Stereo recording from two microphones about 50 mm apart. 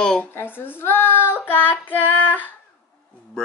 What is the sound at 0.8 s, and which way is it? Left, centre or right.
Child singing, left.